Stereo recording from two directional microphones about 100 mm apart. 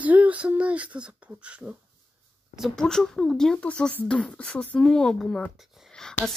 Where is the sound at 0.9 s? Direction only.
10° right (ahead or behind).